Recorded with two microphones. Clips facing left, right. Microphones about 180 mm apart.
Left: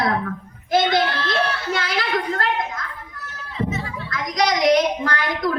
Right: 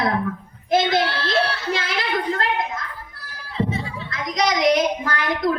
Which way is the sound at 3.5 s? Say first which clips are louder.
Right 1 dB; 30° right (ahead or behind).